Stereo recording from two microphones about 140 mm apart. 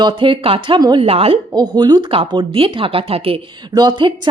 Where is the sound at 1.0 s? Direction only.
45° right (ahead or behind).